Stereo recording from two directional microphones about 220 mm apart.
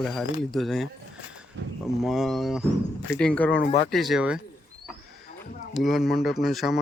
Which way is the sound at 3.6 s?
30° left (ahead or behind).